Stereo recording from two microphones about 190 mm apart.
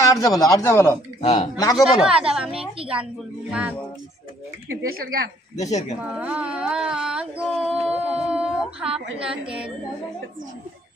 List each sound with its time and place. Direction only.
0.0 s speech: 15° left (ahead or behind)
1.2 s speech: 35° left (ahead or behind)
1.8 s speech: 5° right (ahead or behind)
5.6 s speech: 35° left (ahead or behind)
5.9 s speech: 5° right (ahead or behind)